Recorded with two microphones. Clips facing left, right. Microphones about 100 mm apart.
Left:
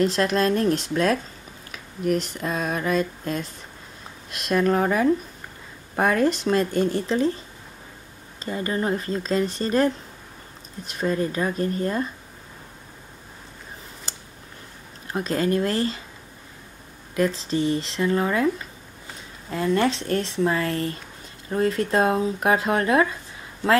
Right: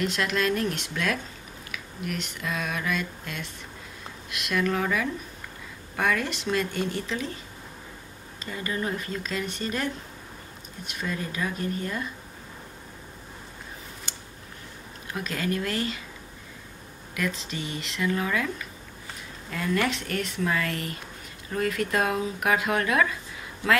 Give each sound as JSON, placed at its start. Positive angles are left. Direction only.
{"t": 0.0, "sound": "speech", "side_deg": 35}
{"t": 1.7, "sound": "a sound", "side_deg": 35}
{"t": 4.3, "sound": "speech", "side_deg": 35}
{"t": 8.5, "sound": "speech", "side_deg": 35}
{"t": 10.9, "sound": "speech", "side_deg": 35}
{"t": 15.0, "sound": "speech", "side_deg": 35}
{"t": 17.1, "sound": "speech", "side_deg": 35}